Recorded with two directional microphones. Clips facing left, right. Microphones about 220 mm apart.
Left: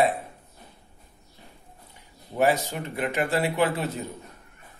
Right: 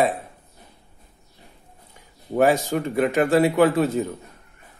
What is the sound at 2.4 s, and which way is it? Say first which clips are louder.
Speech: right 5 dB; 50° right (ahead or behind).